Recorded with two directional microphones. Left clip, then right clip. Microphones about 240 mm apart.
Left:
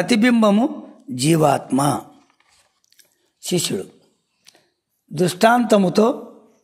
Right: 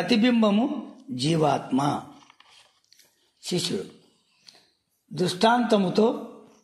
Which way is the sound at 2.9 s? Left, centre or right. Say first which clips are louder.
Left 2 dB; left.